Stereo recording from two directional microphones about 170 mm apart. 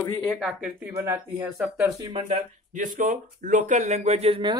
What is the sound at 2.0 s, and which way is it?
Speech, 35° right (ahead or behind).